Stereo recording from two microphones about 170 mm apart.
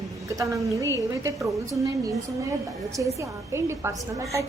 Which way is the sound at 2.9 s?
20° right (ahead or behind).